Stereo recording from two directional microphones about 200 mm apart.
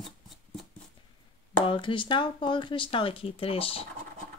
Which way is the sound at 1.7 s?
25° left (ahead or behind).